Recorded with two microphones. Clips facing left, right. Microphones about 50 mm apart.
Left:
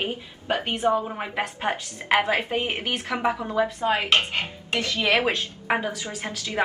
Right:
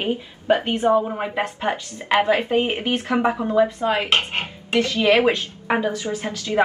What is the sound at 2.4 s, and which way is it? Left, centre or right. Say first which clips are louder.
Speech: right 6 dB; right.